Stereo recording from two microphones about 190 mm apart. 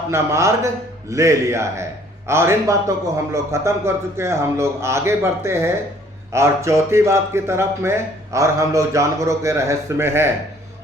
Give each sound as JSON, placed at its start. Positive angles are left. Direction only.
{"t": 0.1, "sound": "speech", "side_deg": -15}